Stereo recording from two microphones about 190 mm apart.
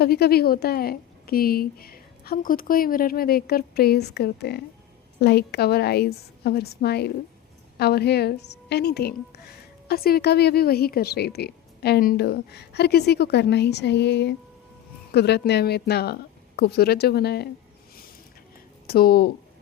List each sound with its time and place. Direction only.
0.0 s a woman's voice: 55° left (ahead or behind)
18.9 s a woman's voice: 55° left (ahead or behind)